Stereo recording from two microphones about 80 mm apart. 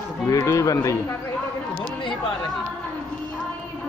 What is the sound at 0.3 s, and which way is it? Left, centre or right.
Speech, left.